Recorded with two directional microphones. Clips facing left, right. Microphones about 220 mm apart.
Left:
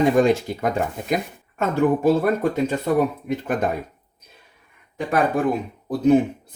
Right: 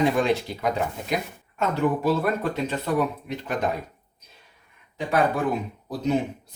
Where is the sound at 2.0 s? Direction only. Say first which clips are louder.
Left 5 dB; 50° left (ahead or behind).